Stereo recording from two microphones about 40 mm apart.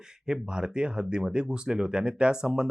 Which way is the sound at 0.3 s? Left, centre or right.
Centre.